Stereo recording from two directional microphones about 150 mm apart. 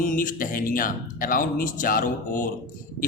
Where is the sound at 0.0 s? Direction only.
65° left (ahead or behind).